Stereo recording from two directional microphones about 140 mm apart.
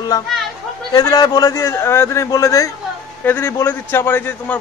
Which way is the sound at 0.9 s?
30° left (ahead or behind).